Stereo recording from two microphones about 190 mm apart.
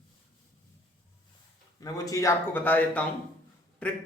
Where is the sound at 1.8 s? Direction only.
20° left (ahead or behind).